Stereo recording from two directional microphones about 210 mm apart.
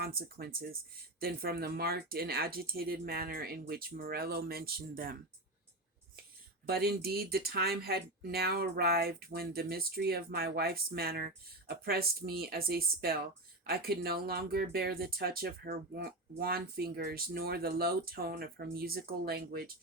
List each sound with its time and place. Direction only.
0.2 s speech: 45° right (ahead or behind)
6.7 s speech: 45° right (ahead or behind)